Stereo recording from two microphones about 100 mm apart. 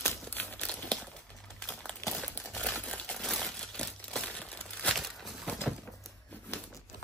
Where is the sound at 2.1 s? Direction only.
10° left (ahead or behind).